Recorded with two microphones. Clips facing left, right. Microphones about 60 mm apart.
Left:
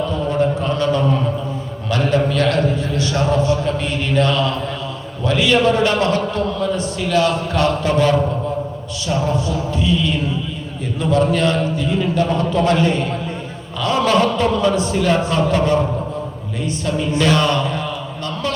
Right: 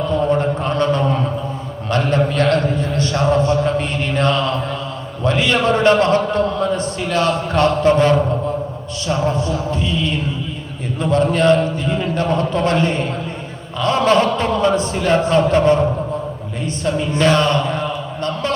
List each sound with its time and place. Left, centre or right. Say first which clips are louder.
0.1 s a sound: right 2 dB; right
1.9 s a man's voice: even; right
9.7 s a man's voice: left 2 dB; right
11.1 s a man's voice: right 3 dB; right
17.1 s a man's voice: right 1 dB; right